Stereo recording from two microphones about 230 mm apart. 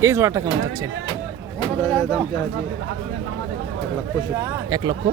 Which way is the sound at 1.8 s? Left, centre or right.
Centre.